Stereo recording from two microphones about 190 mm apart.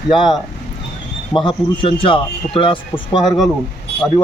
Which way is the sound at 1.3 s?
25° left (ahead or behind).